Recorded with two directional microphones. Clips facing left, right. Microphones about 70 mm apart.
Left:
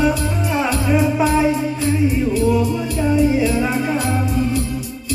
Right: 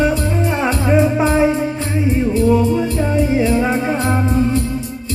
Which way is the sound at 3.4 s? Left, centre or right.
Right.